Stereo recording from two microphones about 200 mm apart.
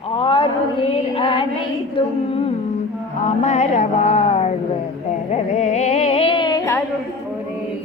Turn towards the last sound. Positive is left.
turn(degrees=15)  # may be behind; listen again after turning